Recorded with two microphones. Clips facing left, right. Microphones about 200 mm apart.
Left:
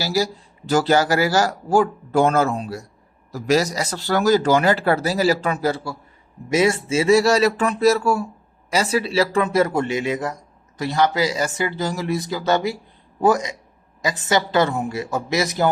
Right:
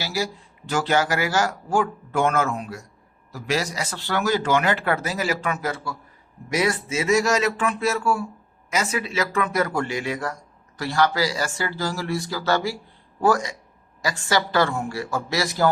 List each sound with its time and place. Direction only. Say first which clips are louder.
0.0 s speech: left 5 dB; 40° left (ahead or behind); by 15.7 s 20° left (ahead or behind)